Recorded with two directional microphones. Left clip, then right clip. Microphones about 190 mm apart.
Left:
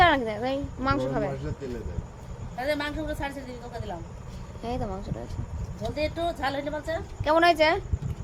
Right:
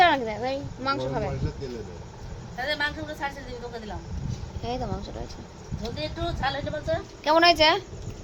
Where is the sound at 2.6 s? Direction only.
60° left (ahead or behind).